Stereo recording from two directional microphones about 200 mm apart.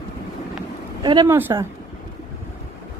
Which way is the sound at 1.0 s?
20° right (ahead or behind).